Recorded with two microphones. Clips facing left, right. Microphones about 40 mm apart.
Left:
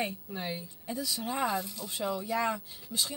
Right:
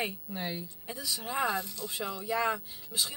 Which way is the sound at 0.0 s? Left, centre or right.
Centre.